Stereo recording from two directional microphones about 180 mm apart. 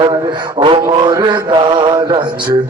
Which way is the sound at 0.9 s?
25° right (ahead or behind).